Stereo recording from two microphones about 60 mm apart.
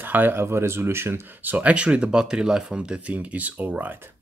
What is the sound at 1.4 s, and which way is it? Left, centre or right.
Speech, right.